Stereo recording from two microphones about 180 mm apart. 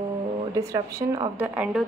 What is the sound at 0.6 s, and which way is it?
Speech, 15° right (ahead or behind).